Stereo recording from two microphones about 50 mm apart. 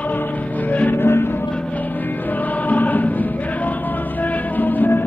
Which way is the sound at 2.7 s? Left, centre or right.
Left.